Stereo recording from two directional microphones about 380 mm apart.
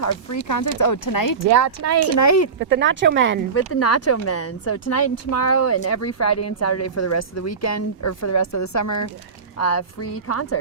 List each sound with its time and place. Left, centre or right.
0.0 s speech: left
1.5 s speech: right
2.1 s speech: left
2.6 s speech: right
3.5 s speech: left